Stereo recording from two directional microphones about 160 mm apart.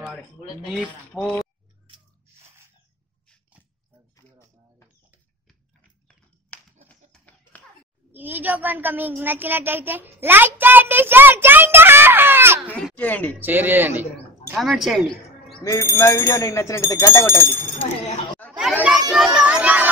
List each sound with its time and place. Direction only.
0.8 s speech: 5° left (ahead or behind)
6.5 s a sound: 10° left (ahead or behind)
8.1 s a child's voice: 10° right (ahead or behind)
12.6 s speech: 10° left (ahead or behind)
13.4 s speech: 10° right (ahead or behind)
15.6 s speech: 20° left (ahead or behind)
18.5 s chatter: 5° right (ahead or behind)
19.1 s music: 5° right (ahead or behind)